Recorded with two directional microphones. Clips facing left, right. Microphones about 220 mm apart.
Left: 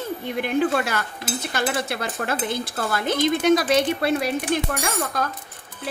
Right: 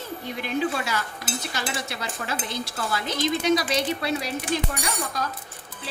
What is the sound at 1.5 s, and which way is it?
Stir, 55° left (ahead or behind).